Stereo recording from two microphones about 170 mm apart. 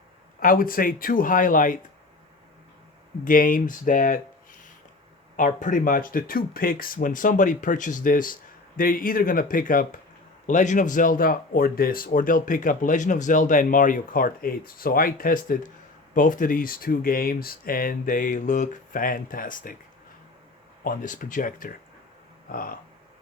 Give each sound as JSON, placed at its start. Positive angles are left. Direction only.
{"t": 0.3, "sound": "speech", "side_deg": 55}
{"t": 3.2, "sound": "speech", "side_deg": 55}
{"t": 20.8, "sound": "speech", "side_deg": 50}